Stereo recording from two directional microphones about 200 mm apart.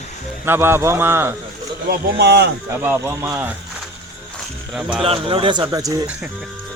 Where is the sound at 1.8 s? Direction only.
55° right (ahead or behind).